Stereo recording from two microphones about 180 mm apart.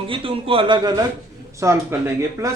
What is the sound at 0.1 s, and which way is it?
A man's voice, 30° right (ahead or behind).